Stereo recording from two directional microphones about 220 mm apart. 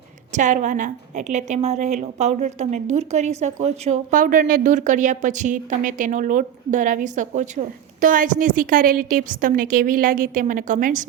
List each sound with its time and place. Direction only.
0.3 s a woman's voice: 35° right (ahead or behind)